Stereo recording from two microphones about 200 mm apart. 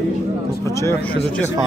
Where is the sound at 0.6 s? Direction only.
15° left (ahead or behind).